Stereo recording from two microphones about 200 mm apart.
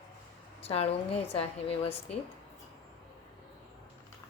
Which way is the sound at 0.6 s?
30° left (ahead or behind).